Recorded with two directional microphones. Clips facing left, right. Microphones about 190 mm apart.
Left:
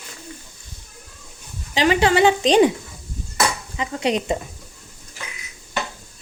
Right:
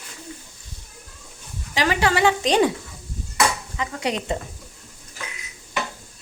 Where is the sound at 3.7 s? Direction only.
20° left (ahead or behind).